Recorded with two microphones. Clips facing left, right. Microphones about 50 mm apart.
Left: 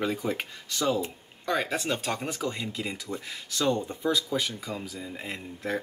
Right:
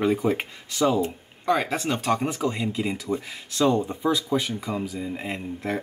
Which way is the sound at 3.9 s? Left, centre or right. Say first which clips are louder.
Right 4 dB; centre.